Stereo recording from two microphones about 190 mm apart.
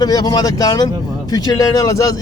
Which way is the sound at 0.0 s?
20° left (ahead or behind).